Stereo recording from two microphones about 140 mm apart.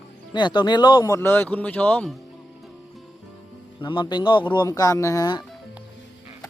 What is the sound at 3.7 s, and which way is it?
Speech, 35° left (ahead or behind).